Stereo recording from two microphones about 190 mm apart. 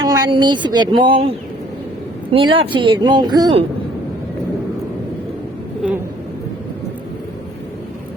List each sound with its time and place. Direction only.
0.0 s speech: 20° right (ahead or behind)